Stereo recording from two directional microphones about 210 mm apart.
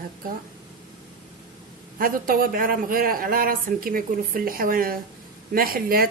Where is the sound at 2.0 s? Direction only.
45° right (ahead or behind).